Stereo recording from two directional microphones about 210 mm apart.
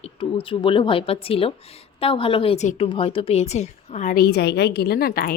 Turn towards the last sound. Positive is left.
turn(degrees=45)  # may be behind; listen again after turning